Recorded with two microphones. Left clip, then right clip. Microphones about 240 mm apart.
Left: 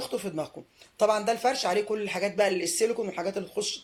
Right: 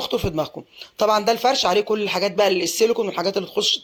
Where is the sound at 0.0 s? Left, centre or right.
Right.